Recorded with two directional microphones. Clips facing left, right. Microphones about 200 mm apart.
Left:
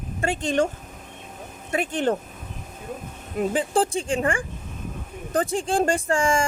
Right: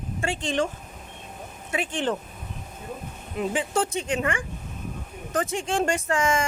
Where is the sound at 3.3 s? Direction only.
35° left (ahead or behind).